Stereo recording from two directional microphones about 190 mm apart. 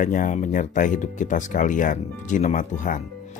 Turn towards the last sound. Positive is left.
turn(degrees=45)  # may be behind; listen again after turning